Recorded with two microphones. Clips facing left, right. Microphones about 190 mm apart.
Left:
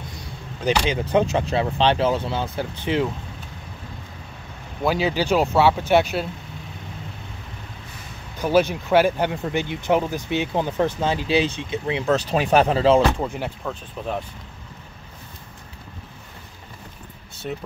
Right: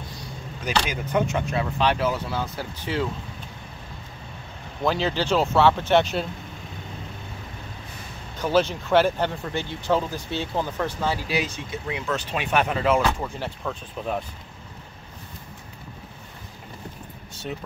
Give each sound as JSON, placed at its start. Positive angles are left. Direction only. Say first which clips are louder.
{"t": 0.8, "sound": "speech", "louder": "left 5 dB", "side_deg": 30}
{"t": 4.8, "sound": "speech", "louder": "left 2 dB", "side_deg": 10}
{"t": 8.4, "sound": "speech", "louder": "left 3 dB", "side_deg": 10}
{"t": 12.1, "sound": "speech", "louder": "left 7 dB", "side_deg": 40}
{"t": 13.7, "sound": "speech", "louder": "even", "side_deg": 0}
{"t": 17.4, "sound": "speech", "louder": "left 3 dB", "side_deg": 0}